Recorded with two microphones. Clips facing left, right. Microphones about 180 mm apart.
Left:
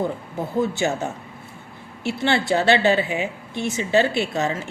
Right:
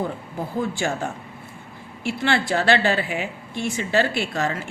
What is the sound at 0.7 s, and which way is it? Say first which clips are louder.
Speech: left 3 dB; 20° left (ahead or behind).